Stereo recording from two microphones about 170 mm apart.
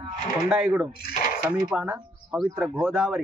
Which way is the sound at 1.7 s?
10° right (ahead or behind).